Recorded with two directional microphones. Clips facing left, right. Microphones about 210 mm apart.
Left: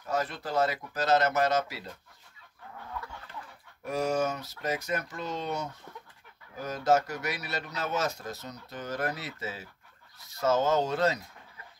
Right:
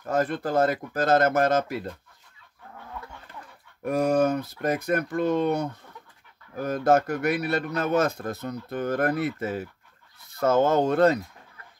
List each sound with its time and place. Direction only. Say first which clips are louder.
0.0 s speech: right 7 dB; 55° right (ahead or behind)
3.8 s a man's voice: right 7 dB; 55° right (ahead or behind)